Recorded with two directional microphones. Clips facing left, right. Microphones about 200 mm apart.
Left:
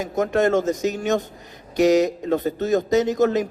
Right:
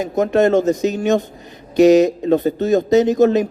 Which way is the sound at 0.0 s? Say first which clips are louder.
Right 5 dB; 20° right (ahead or behind).